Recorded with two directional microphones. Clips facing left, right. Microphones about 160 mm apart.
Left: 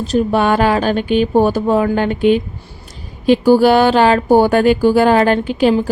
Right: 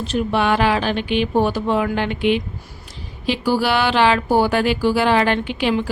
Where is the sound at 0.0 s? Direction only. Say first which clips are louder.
Left 5 dB; 40° left (ahead or behind).